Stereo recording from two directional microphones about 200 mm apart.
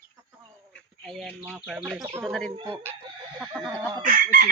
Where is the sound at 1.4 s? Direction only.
5° right (ahead or behind).